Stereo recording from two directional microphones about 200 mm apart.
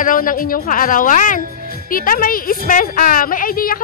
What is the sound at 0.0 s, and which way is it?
A woman's voice, 45° left (ahead or behind).